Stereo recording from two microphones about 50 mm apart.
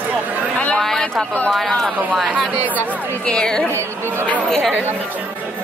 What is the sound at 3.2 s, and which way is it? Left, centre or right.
A woman's voice, centre.